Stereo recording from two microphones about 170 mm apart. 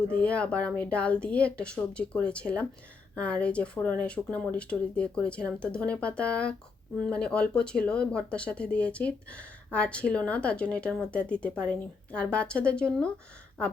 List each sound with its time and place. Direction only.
0.1 s speech: 5° left (ahead or behind)